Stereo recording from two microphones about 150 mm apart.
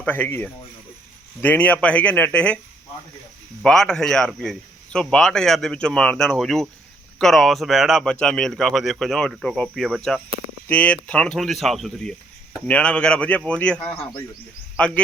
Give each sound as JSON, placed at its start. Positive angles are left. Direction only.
{"t": 0.0, "sound": "speech", "side_deg": 15}
{"t": 3.6, "sound": "a man's voice", "side_deg": 5}
{"t": 13.8, "sound": "a man's voice", "side_deg": 35}
{"t": 14.8, "sound": "speech", "side_deg": 5}